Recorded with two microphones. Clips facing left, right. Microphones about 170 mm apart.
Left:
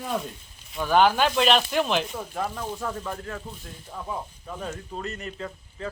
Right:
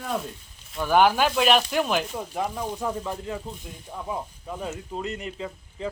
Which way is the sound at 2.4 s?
15° right (ahead or behind).